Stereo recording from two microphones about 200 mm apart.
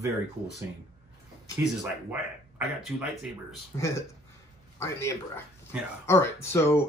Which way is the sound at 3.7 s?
15° left (ahead or behind).